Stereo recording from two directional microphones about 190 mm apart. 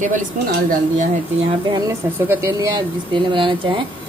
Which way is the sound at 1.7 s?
20° right (ahead or behind).